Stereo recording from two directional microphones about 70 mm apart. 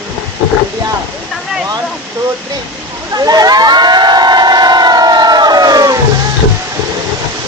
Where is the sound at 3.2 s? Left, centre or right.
Right.